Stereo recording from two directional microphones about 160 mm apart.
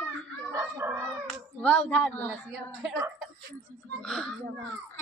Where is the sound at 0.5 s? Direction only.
15° right (ahead or behind).